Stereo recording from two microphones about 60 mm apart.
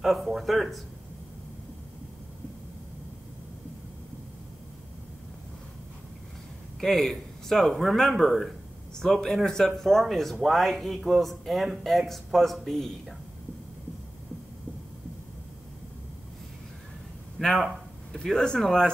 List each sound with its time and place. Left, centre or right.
0.0 s speech: centre
6.8 s speech: centre
17.4 s a sound: centre
18.1 s speech: centre